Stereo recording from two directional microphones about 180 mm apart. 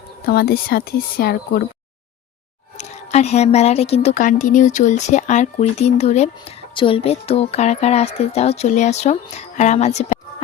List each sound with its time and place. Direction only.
0.3 s speech: 55° left (ahead or behind)
2.7 s a woman's voice: 40° left (ahead or behind)